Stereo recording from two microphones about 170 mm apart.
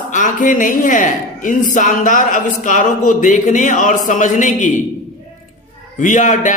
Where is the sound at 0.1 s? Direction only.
50° left (ahead or behind).